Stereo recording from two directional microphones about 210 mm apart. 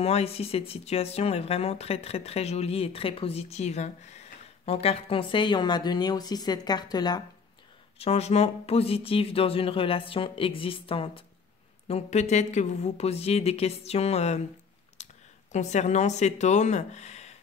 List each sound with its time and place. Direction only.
0.0 s speech: 30° left (ahead or behind)
8.0 s speech: 30° left (ahead or behind)
15.0 s a sound: 30° left (ahead or behind)
15.5 s speech: 35° left (ahead or behind)